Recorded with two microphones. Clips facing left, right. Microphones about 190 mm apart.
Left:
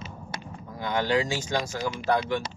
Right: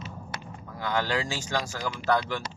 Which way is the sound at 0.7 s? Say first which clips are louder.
Left 3 dB; 15° left (ahead or behind).